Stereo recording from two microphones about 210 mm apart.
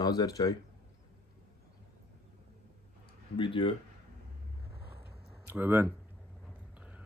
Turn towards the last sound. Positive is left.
turn(degrees=-5)  # may be behind; listen again after turning